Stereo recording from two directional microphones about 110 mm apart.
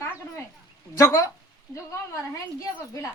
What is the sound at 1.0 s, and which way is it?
Speech, 30° left (ahead or behind).